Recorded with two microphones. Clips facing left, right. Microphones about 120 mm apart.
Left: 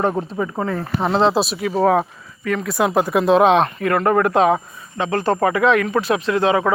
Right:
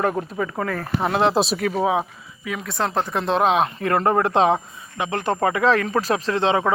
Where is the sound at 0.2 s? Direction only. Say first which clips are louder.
Left 2 dB; 15° left (ahead or behind).